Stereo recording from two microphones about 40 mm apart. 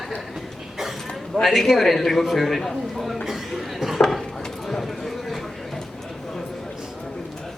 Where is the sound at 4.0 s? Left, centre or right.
Centre.